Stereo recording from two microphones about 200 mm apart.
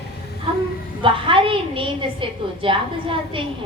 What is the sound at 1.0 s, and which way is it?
A woman's voice, 25° right (ahead or behind).